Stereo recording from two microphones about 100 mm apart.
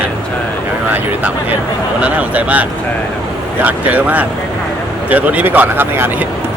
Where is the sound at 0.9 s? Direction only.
15° right (ahead or behind).